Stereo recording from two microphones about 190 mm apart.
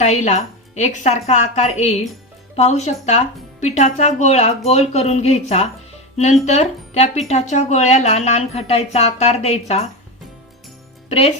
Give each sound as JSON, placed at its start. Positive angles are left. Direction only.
{"t": 0.0, "sound": "speech", "side_deg": 35}
{"t": 11.1, "sound": "speech", "side_deg": 30}